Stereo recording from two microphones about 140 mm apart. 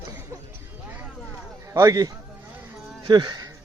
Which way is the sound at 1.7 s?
25° right (ahead or behind).